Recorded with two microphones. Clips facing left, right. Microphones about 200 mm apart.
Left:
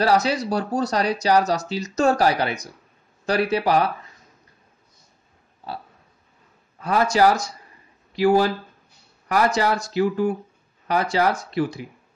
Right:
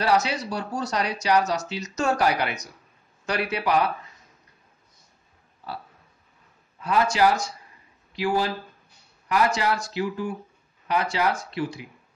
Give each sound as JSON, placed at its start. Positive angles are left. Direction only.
{"t": 0.0, "sound": "speech", "side_deg": 35}
{"t": 6.8, "sound": "speech", "side_deg": 40}
{"t": 9.3, "sound": "speech", "side_deg": 40}